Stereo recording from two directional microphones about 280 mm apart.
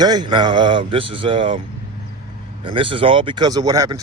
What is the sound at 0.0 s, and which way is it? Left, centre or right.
A man's voice, centre.